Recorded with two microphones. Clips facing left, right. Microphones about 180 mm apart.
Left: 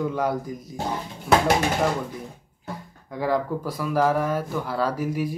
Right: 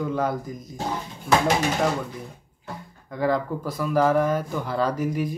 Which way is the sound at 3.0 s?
10° left (ahead or behind).